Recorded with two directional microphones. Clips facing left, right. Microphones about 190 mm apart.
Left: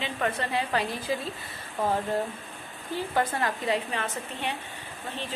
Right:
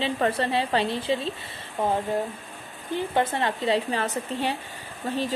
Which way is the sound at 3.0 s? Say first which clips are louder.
Right 3 dB; 25° right (ahead or behind).